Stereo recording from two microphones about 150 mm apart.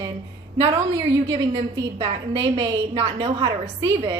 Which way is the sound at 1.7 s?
40° right (ahead or behind).